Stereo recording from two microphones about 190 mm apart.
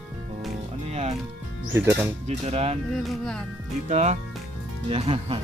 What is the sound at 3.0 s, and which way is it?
Speech, centre (ahead or behind).